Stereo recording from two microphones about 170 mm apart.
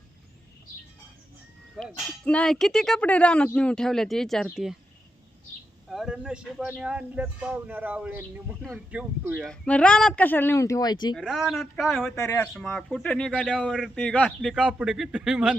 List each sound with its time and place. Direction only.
2.2 s speech: 5° left (ahead or behind)
5.9 s speech: 5° right (ahead or behind); by 11.1 s 25° left (ahead or behind)
11.1 s speech: centre (ahead or behind)
12.1 s speech: 15° left (ahead or behind); by 15.5 s centre (ahead or behind)